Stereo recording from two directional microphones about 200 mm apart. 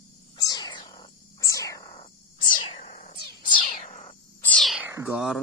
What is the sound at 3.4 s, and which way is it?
Cat, 40° left (ahead or behind).